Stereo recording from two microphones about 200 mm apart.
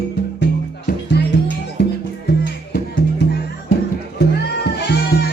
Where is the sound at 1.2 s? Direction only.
55° left (ahead or behind).